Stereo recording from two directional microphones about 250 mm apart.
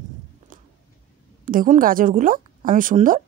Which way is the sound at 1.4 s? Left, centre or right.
Right.